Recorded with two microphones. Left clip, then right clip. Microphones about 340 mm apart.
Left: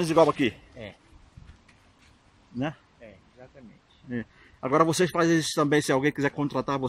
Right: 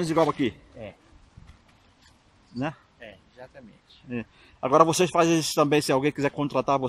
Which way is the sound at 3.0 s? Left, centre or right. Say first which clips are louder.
Right 4 dB; right.